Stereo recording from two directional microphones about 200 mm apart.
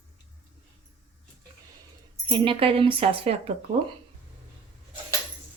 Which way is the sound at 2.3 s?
25° right (ahead or behind).